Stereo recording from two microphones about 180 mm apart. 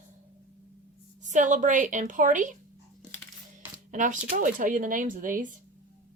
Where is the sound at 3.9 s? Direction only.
45° right (ahead or behind).